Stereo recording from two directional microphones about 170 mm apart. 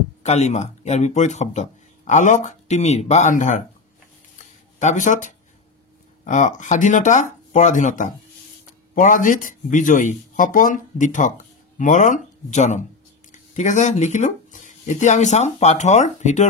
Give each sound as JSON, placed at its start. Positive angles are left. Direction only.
{"t": 0.2, "sound": "speech", "side_deg": 40}
{"t": 4.7, "sound": "speech", "side_deg": 45}